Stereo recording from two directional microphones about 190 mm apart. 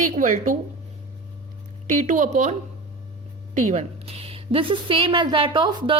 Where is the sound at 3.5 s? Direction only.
35° right (ahead or behind).